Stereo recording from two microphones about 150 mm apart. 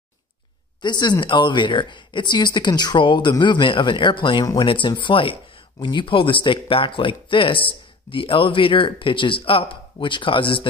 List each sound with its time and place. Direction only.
0.8 s speech: 30° left (ahead or behind)